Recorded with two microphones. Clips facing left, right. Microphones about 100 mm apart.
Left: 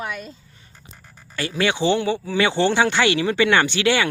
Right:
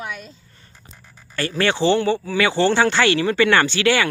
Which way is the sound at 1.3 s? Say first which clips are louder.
Right 1 dB; 10° left (ahead or behind).